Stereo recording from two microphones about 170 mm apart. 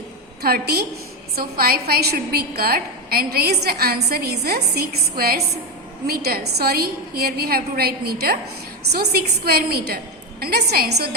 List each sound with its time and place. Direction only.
0.4 s a woman's voice: 65° right (ahead or behind)